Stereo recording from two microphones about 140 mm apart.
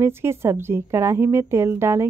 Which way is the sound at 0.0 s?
20° right (ahead or behind).